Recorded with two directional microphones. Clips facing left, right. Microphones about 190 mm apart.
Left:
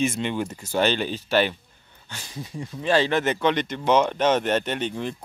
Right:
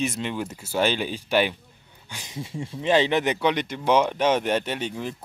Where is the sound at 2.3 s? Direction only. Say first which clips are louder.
Right 2 dB; 25° right (ahead or behind).